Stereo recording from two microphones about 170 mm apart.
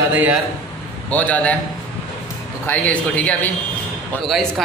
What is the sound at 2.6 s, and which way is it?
A man's voice, 10° left (ahead or behind).